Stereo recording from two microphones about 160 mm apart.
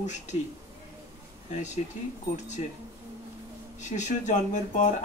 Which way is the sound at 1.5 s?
50° left (ahead or behind).